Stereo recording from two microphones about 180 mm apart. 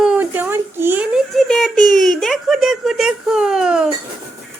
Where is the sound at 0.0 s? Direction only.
5° right (ahead or behind).